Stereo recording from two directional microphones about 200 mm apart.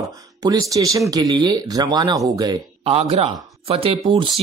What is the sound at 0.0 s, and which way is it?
Speech, 20° right (ahead or behind).